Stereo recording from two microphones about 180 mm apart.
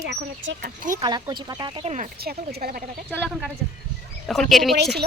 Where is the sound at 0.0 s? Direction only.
65° right (ahead or behind).